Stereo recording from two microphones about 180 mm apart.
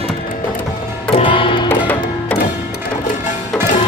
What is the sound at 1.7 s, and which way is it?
Music, 10° left (ahead or behind).